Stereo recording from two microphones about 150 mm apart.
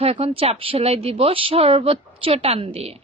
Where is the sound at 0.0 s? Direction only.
40° right (ahead or behind).